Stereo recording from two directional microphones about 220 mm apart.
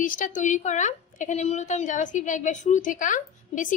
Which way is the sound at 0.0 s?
35° left (ahead or behind).